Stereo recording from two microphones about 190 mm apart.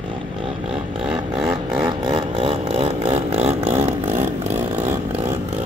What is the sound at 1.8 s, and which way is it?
Vehicle, 25° right (ahead or behind).